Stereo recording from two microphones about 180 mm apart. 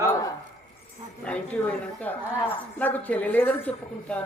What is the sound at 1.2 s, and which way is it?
Speech, 5° left (ahead or behind).